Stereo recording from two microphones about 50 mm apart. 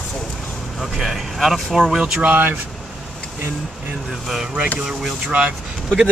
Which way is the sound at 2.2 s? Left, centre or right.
Right.